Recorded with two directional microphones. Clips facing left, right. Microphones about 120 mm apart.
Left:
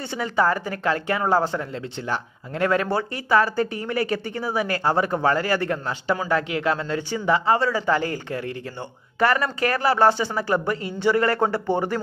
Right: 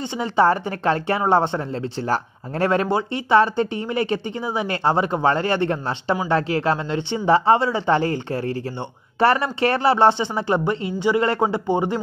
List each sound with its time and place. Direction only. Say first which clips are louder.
0.1 s a woman's voice: right 4 dB; 25° right (ahead or behind)